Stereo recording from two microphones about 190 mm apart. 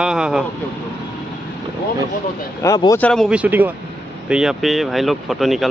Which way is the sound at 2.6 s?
20° left (ahead or behind).